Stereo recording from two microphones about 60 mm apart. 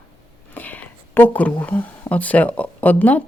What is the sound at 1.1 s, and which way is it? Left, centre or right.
Speech, left.